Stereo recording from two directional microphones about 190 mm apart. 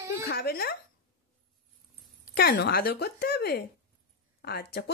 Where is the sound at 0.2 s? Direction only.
55° left (ahead or behind).